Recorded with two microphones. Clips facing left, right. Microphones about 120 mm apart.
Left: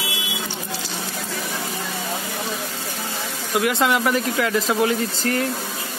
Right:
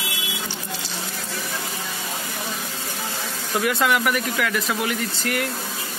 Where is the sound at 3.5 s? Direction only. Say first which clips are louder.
Left 1 dB; 25° left (ahead or behind).